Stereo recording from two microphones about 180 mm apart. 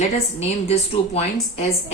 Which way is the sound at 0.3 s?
35° left (ahead or behind).